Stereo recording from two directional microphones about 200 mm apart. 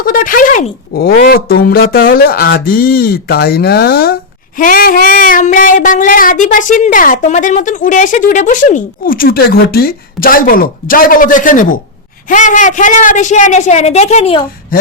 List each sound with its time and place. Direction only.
0.0 s a woman's voice: 45° left (ahead or behind)